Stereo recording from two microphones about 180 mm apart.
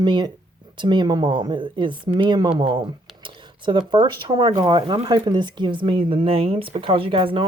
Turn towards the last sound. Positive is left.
turn(degrees=-30)  # may be behind; listen again after turning